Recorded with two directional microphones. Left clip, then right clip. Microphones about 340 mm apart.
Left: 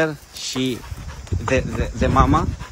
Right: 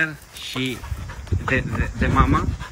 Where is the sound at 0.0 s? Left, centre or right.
Centre.